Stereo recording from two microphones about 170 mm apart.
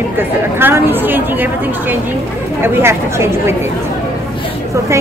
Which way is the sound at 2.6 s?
15° right (ahead or behind).